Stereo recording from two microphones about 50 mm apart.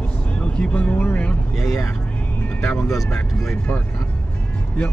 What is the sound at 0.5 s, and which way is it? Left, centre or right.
Vehicle, left.